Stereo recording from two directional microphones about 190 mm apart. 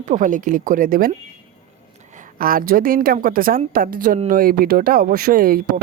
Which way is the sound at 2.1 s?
50° right (ahead or behind).